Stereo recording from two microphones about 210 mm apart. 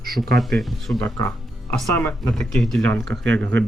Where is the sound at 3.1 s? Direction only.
60° right (ahead or behind).